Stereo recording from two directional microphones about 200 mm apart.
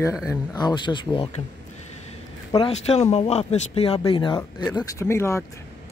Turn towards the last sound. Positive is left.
turn(degrees=15)  # may be behind; listen again after turning